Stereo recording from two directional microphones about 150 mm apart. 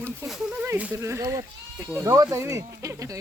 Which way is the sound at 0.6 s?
10° right (ahead or behind).